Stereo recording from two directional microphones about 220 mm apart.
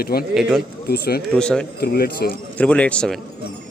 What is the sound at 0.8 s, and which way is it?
Speech, 45° left (ahead or behind).